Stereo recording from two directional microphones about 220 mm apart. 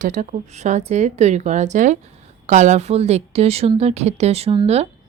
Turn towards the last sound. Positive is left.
turn(degrees=-25)  # may be behind; listen again after turning